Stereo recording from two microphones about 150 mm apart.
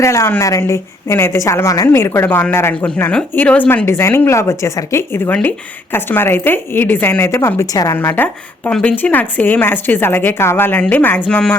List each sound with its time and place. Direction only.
0.0 s a woman's voice: 20° left (ahead or behind)